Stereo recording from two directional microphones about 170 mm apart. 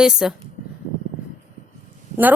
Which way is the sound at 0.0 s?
5° right (ahead or behind).